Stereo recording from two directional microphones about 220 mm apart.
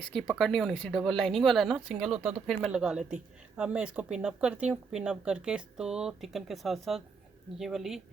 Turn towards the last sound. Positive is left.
turn(degrees=0)  # may be behind; listen again after turning